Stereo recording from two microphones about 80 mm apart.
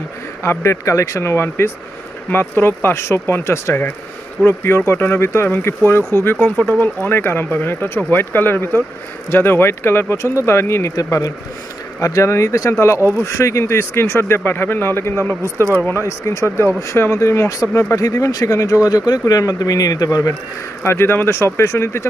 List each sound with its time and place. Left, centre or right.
0.4 s speech: left
11.0 s speech: left
20.8 s speech: left